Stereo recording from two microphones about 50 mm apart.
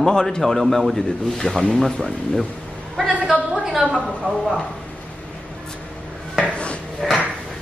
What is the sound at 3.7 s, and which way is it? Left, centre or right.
Speech, centre.